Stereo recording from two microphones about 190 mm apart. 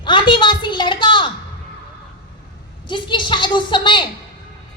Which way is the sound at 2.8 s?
25° left (ahead or behind).